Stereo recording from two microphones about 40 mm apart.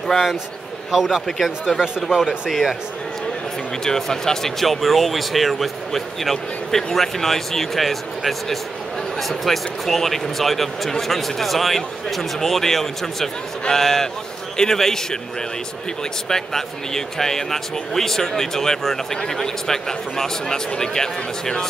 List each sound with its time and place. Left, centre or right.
0.9 s speech: centre
1.2 s speech: centre
2.0 s speech: centre
3.8 s speech: centre
16.3 s speech: centre